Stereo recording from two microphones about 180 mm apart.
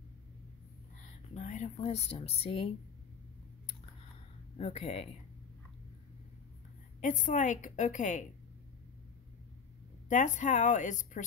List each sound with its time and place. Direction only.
1.3 s speech: 40° left (ahead or behind)
4.6 s speech: 35° left (ahead or behind)
7.0 s a woman's voice: 45° left (ahead or behind)
10.0 s a woman's voice: 40° left (ahead or behind)